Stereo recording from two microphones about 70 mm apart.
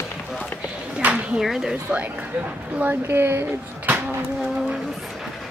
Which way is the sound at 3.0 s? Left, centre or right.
Right.